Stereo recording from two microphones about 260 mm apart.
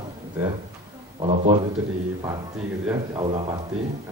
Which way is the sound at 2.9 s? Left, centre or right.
Centre.